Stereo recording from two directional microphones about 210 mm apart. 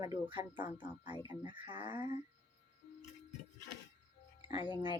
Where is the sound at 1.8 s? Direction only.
10° right (ahead or behind).